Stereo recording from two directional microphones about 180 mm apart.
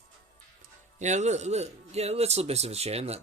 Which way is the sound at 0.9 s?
40° right (ahead or behind).